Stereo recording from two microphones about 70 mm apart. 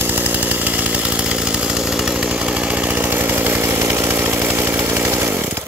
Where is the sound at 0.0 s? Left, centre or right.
Right.